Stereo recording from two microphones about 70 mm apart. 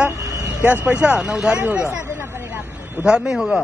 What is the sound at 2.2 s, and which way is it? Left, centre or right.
Vehicle, right.